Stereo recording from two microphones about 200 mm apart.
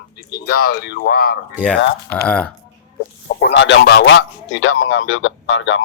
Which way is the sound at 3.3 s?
60° left (ahead or behind).